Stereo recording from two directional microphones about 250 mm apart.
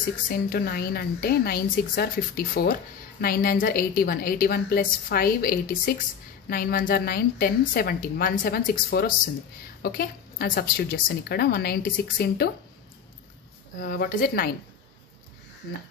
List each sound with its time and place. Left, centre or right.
0.3 s a woman's voice: left
13.7 s a woman's voice: left